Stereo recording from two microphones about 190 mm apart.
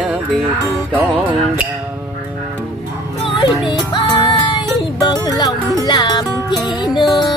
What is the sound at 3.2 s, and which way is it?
Music, 25° left (ahead or behind).